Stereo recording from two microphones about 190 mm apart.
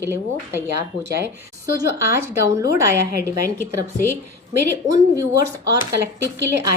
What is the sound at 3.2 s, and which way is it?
Speech, 10° left (ahead or behind).